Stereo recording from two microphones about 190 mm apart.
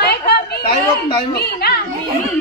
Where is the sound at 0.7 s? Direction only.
30° left (ahead or behind).